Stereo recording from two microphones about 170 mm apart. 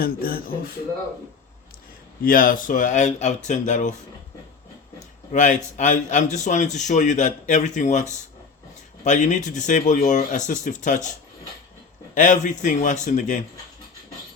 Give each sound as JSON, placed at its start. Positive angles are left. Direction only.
{"t": 0.0, "sound": "speech", "side_deg": 60}
{"t": 2.2, "sound": "a man's voice", "side_deg": 55}
{"t": 5.3, "sound": "a man's voice", "side_deg": 45}
{"t": 12.1, "sound": "a man's voice", "side_deg": 45}